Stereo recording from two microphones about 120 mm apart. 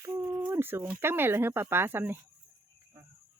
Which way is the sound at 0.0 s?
20° right (ahead or behind).